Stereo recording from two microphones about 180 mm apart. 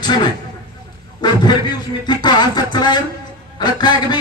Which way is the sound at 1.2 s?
25° left (ahead or behind).